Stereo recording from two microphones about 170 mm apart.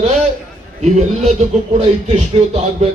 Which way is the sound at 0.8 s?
45° right (ahead or behind).